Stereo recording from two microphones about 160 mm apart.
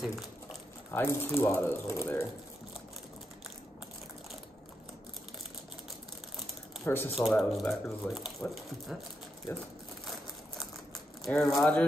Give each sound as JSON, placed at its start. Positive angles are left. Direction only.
{"t": 0.0, "sound": "a sound", "side_deg": 0}
{"t": 0.9, "sound": "speech", "side_deg": 15}
{"t": 6.8, "sound": "speech", "side_deg": 15}
{"t": 7.2, "sound": "speech", "side_deg": 0}
{"t": 11.2, "sound": "speech", "side_deg": 0}